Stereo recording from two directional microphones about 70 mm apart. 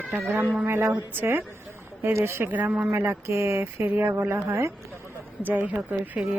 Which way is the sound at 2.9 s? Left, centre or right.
Right.